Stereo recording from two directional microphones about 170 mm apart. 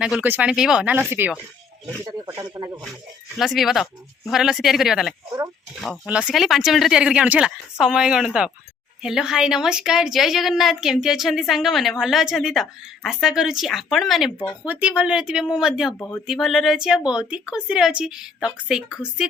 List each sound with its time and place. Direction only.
0.0 s a woman's voice: 5° right (ahead or behind)
2.0 s speech: 25° right (ahead or behind)
3.3 s a woman's voice: centre (ahead or behind)
16.0 s a woman's voice: 10° left (ahead or behind)